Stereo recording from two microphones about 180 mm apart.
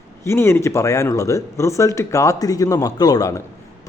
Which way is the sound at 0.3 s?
15° left (ahead or behind).